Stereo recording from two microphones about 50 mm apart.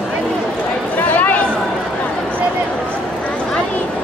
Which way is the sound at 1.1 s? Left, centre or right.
Left.